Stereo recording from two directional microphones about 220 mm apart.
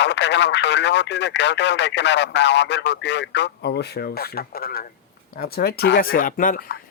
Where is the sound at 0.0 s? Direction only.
50° left (ahead or behind).